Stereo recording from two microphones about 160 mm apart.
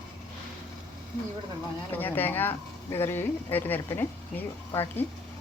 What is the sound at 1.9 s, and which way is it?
Speech, 10° left (ahead or behind).